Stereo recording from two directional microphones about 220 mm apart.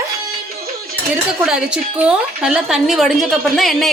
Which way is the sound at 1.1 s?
5° right (ahead or behind).